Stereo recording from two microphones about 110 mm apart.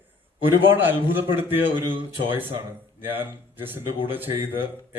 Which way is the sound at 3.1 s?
20° right (ahead or behind).